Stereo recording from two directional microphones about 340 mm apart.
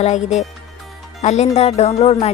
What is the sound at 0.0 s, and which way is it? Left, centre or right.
Speech, left.